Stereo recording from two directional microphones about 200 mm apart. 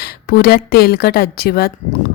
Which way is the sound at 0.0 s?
50° left (ahead or behind).